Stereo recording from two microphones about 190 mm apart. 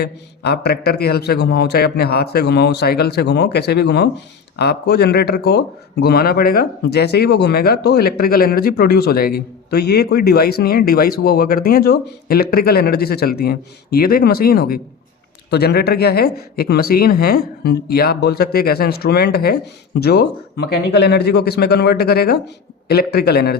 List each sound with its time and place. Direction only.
0.0 s speech: 60° left (ahead or behind)